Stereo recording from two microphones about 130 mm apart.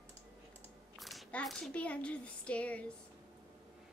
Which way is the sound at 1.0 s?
Centre (ahead or behind).